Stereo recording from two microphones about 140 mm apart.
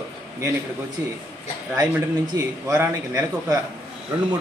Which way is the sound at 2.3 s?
25° right (ahead or behind).